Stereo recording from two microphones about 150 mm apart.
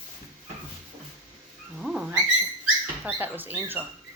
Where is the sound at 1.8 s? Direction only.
5° right (ahead or behind).